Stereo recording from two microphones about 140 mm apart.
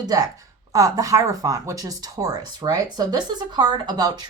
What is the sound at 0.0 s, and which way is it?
Speech, 25° right (ahead or behind).